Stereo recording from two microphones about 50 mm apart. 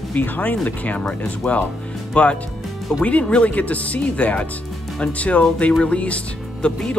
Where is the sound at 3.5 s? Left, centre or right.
Left.